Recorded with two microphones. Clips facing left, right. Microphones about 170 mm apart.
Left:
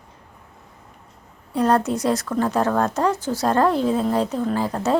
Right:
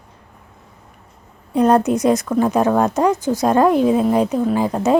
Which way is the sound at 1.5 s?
20° right (ahead or behind).